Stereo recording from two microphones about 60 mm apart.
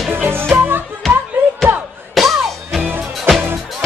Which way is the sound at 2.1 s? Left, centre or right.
Centre.